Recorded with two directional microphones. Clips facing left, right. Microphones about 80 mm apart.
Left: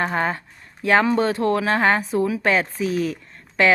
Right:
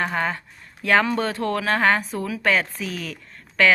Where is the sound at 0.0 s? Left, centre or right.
Left.